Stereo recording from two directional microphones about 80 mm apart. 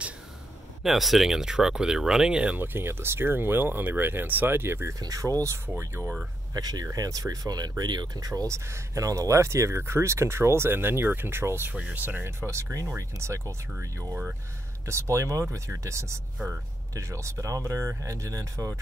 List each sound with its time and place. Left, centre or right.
0.8 s speech: centre
2.6 s speech: right
4.9 s speech: right
6.5 s speech: right